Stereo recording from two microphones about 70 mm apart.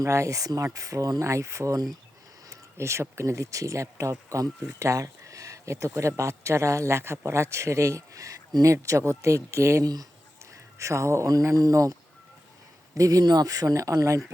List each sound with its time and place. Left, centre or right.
0.0 s speech: right
2.5 s speech: right
9.8 s speech: right
10.5 s speech: right